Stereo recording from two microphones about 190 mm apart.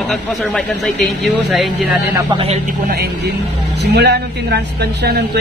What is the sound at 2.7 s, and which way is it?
A man's voice, 50° right (ahead or behind).